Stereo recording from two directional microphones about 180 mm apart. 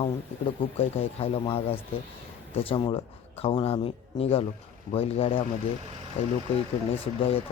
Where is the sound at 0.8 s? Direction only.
30° left (ahead or behind).